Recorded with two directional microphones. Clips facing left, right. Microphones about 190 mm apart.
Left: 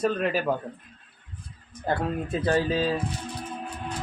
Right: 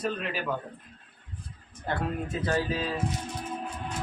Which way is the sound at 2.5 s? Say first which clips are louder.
Left 6 dB; 30° left (ahead or behind).